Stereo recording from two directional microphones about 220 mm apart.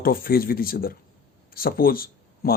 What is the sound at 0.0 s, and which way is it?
Speech, 40° left (ahead or behind).